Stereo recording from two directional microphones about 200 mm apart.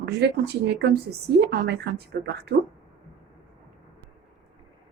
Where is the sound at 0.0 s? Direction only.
55° right (ahead or behind).